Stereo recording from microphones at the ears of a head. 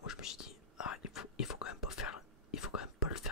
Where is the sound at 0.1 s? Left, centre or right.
Left.